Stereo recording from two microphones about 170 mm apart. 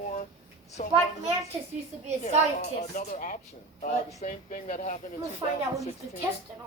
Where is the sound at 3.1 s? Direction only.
50° left (ahead or behind).